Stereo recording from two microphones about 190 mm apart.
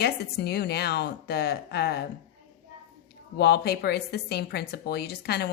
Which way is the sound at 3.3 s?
60° left (ahead or behind).